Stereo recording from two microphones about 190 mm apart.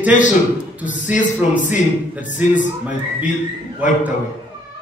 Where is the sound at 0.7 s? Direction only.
10° right (ahead or behind).